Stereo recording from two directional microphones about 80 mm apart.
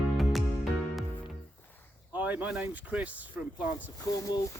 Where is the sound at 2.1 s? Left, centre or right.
Centre.